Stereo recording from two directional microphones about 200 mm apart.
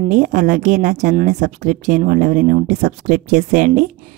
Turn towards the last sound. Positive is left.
turn(degrees=-40)  # may be behind; listen again after turning